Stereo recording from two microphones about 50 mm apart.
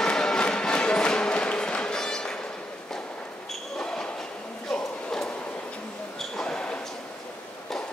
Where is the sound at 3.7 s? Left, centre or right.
Centre.